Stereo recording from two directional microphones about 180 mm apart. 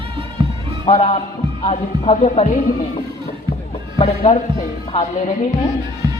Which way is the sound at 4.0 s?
35° left (ahead or behind).